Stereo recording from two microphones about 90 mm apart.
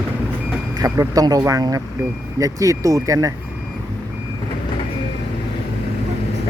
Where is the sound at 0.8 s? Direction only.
40° right (ahead or behind).